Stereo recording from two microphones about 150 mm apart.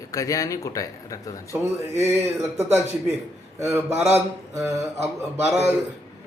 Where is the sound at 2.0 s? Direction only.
20° right (ahead or behind).